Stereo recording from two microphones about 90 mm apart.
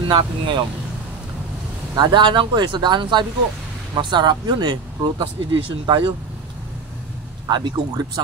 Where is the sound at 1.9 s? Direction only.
55° right (ahead or behind).